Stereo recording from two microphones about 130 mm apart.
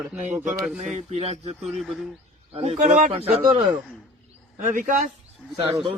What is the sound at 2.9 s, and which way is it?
Speech, 70° right (ahead or behind).